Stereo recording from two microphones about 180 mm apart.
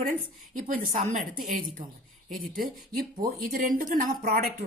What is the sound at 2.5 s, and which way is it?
A woman's voice, 55° right (ahead or behind).